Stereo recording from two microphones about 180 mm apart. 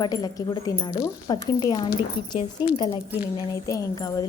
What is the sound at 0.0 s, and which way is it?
Speech, 20° left (ahead or behind).